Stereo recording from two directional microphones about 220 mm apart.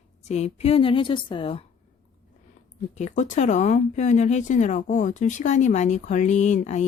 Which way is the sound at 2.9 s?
30° left (ahead or behind).